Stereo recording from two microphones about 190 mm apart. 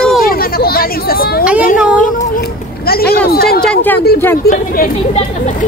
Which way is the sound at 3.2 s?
55° left (ahead or behind).